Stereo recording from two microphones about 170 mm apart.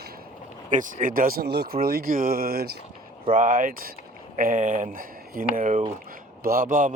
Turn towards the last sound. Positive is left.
turn(degrees=-50)  # may be behind; listen again after turning